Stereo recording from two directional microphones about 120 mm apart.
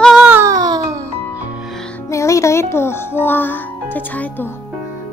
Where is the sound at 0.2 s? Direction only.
15° right (ahead or behind).